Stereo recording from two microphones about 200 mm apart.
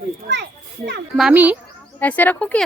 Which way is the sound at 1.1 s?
5° right (ahead or behind).